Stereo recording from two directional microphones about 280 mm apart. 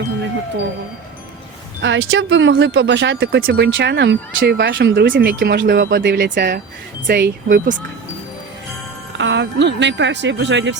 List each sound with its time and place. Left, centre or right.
1.8 s speech: right
9.1 s speech: right